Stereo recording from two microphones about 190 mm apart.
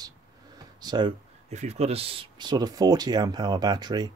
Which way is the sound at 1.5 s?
35° right (ahead or behind).